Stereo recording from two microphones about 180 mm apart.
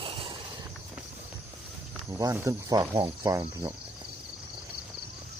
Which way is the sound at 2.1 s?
15° right (ahead or behind).